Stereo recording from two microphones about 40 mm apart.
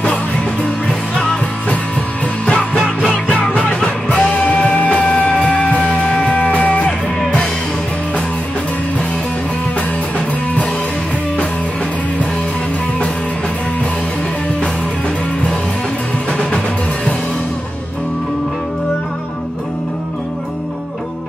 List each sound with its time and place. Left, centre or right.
0.8 s music: centre
2.4 s music: left
3.8 s music: left
6.3 s music: left
9.8 s music: left